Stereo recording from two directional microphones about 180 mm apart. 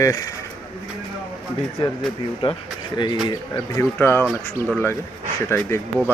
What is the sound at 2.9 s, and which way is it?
Speech, 25° left (ahead or behind).